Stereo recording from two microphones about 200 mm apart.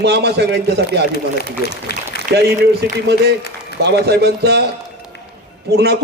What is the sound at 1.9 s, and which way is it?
Speech, 50° left (ahead or behind).